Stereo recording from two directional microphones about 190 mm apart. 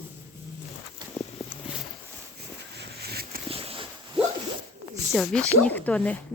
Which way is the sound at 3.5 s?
30° right (ahead or behind).